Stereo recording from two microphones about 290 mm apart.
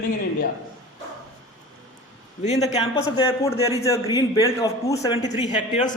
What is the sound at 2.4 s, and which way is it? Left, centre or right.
A man's voice, left.